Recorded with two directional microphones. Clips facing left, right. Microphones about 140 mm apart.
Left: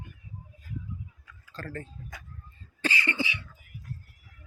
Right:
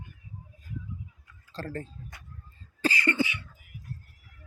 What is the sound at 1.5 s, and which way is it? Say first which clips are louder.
Speech: right 3 dB; 35° right (ahead or behind).